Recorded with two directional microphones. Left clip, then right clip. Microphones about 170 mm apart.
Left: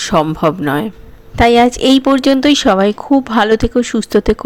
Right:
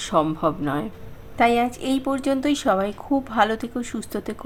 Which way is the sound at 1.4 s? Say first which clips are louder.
Left 10 dB; 50° left (ahead or behind).